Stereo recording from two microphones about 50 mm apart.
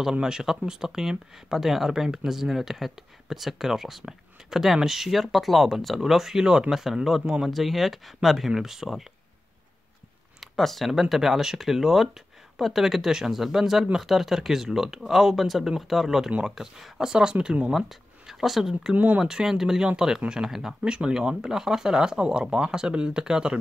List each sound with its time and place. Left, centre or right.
0.1 s speech: centre
6.8 s speech: centre
10.4 s a sound: centre
10.9 s speech: centre
20.8 s speech: centre